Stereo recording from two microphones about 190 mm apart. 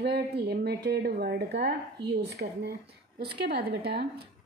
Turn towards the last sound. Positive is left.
turn(degrees=-55)  # may be behind; listen again after turning